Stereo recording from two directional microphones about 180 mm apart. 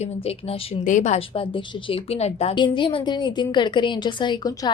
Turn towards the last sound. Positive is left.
turn(degrees=25)  # may be behind; listen again after turning